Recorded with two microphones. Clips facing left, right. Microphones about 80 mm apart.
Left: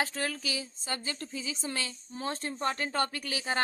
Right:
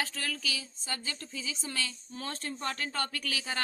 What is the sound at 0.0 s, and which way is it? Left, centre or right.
Speech, left.